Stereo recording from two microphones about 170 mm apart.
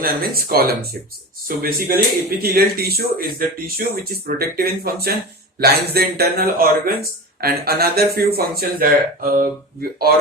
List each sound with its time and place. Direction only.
0.0 s speech: 60° right (ahead or behind)